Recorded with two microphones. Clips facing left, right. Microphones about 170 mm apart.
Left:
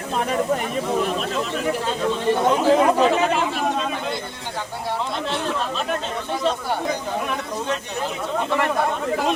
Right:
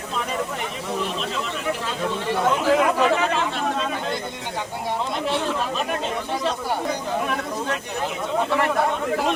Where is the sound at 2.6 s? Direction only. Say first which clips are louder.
Left 3 dB; 30° left (ahead or behind).